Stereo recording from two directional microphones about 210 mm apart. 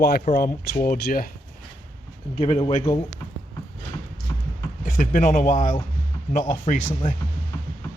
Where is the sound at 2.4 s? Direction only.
25° left (ahead or behind).